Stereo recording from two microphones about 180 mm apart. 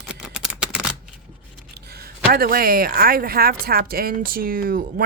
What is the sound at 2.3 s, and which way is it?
A woman's voice, 55° right (ahead or behind).